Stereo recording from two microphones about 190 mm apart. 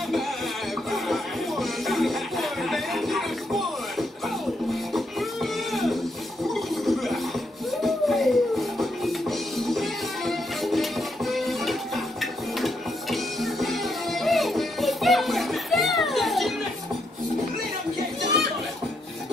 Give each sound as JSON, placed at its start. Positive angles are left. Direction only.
{"t": 0.9, "sound": "music", "side_deg": 0}
{"t": 4.9, "sound": "music", "side_deg": 0}
{"t": 6.4, "sound": "a sound", "side_deg": 0}
{"t": 7.8, "sound": "music", "side_deg": 0}